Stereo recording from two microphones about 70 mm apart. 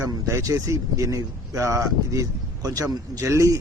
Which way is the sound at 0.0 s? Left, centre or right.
Right.